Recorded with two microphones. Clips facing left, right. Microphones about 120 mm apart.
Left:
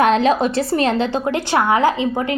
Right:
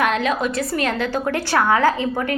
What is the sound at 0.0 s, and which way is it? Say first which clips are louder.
A woman's voice: left 5 dB; 30° left (ahead or behind).